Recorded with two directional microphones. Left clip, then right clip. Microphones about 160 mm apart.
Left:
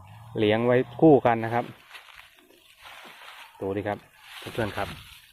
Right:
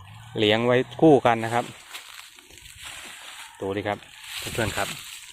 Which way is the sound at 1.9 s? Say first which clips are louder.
Right 5 dB; 20° right (ahead or behind).